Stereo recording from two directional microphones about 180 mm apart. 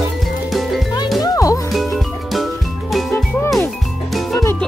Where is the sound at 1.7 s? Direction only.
Centre (ahead or behind).